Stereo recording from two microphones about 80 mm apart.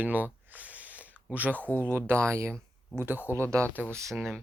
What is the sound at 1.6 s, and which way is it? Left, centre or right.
Speech, left.